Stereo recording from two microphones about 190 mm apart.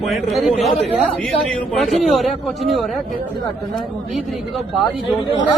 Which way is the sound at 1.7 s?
Centre (ahead or behind).